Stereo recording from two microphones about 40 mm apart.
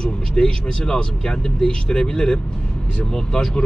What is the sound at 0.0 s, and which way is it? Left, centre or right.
A man's voice, left.